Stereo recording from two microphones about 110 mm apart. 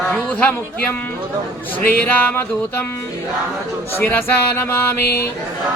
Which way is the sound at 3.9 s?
20° left (ahead or behind).